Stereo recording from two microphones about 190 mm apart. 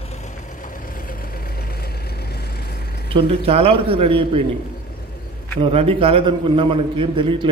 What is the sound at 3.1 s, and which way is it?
A man's voice, 30° right (ahead or behind).